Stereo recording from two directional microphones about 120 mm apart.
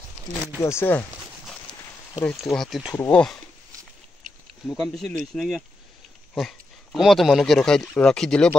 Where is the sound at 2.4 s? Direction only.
Centre (ahead or behind).